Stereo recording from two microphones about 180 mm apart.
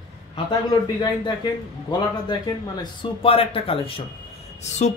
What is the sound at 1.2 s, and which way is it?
Speech, 25° left (ahead or behind).